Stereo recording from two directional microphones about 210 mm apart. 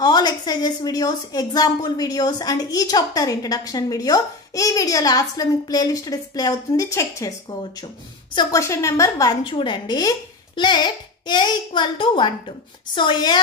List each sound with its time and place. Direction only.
0.0 s a woman's voice: 20° left (ahead or behind)
8.4 s a woman's voice: 15° left (ahead or behind)